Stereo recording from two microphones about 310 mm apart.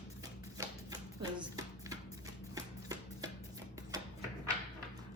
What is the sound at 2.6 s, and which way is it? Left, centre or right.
Chopping, centre.